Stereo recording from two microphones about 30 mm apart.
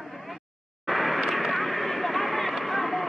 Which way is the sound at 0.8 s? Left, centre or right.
Centre.